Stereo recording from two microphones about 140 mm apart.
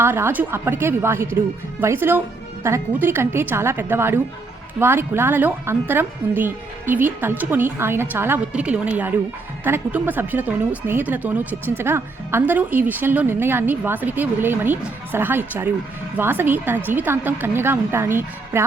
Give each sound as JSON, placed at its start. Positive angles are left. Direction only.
{"t": 0.0, "sound": "speech", "side_deg": -15}